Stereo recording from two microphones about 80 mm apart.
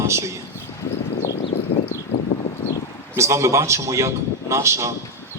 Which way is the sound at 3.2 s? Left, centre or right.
Right.